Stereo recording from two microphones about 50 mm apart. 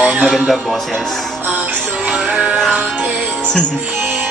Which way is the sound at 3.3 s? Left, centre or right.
Left.